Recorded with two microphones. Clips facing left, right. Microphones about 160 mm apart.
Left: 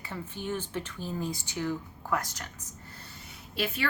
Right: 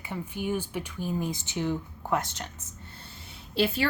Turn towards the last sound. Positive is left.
turn(degrees=-30)  # may be behind; listen again after turning